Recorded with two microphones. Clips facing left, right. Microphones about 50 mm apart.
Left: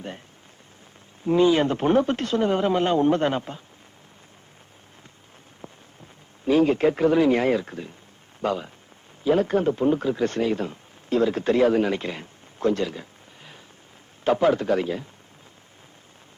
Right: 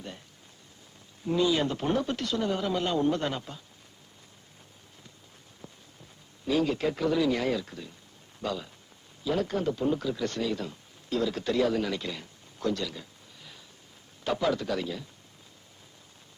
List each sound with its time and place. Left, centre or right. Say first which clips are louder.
1.2 s speech: left 7 dB; left
5.6 s rain on surface: left 6 dB; left
6.4 s a man's voice: left 8 dB; left